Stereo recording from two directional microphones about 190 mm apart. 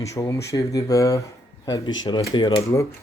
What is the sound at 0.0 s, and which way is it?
Speech, 15° left (ahead or behind).